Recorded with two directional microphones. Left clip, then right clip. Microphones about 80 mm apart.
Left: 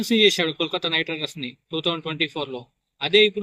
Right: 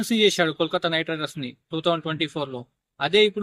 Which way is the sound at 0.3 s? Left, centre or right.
Right.